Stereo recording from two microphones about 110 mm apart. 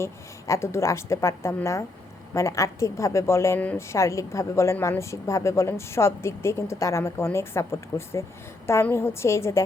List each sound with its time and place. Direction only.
0.0 s a woman's voice: 25° left (ahead or behind)